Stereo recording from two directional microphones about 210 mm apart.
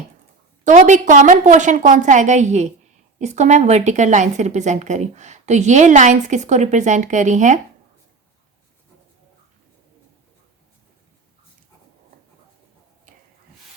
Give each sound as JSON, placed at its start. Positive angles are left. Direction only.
{"t": 0.6, "sound": "a woman's voice", "side_deg": -35}